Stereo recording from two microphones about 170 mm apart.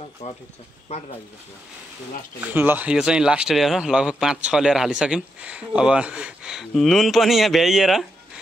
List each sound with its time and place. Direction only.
0.8 s speech: 40° left (ahead or behind)
2.5 s speech: 10° right (ahead or behind)